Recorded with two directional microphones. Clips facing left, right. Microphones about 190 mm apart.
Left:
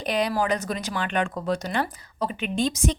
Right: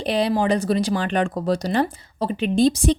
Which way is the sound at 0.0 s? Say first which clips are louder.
Right 4 dB; 30° right (ahead or behind).